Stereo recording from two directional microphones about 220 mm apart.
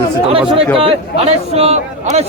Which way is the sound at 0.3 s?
25° right (ahead or behind).